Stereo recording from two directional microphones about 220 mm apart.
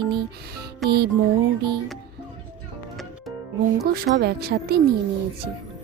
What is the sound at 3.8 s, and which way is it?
Speech, 45° right (ahead or behind).